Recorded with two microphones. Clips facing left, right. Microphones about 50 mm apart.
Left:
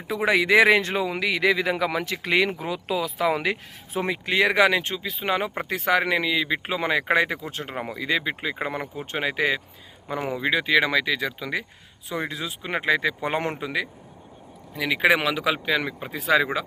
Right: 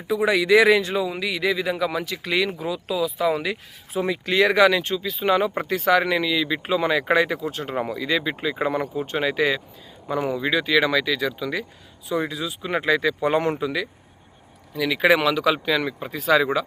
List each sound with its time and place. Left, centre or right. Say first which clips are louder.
0.2 s speech: right 1 dB; left
12.7 s speech: right 2 dB; left